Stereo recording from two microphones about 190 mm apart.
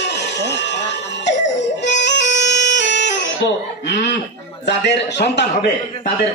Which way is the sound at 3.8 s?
65° left (ahead or behind).